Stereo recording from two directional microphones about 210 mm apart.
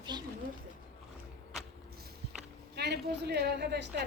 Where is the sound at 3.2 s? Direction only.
50° right (ahead or behind).